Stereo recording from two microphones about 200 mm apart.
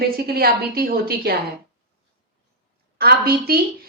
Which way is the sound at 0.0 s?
50° right (ahead or behind).